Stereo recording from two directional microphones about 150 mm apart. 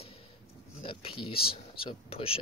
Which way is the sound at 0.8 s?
35° left (ahead or behind).